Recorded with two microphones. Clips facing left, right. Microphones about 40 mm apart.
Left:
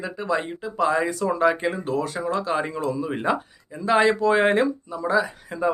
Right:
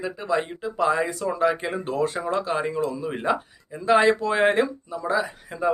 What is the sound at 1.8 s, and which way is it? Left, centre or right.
Speech, right.